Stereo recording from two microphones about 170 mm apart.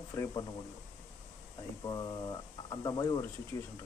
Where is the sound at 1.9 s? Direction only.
20° left (ahead or behind).